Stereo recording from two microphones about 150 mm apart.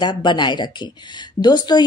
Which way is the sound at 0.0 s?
30° left (ahead or behind).